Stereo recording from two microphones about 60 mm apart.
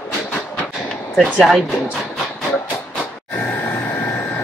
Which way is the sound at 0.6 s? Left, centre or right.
Centre.